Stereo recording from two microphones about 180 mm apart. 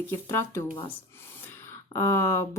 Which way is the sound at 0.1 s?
15° left (ahead or behind).